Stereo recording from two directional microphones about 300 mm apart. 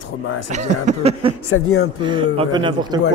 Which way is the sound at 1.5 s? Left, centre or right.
Left.